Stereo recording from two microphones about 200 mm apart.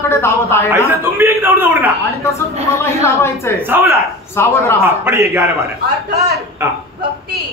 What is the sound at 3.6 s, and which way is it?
Speech, 10° right (ahead or behind).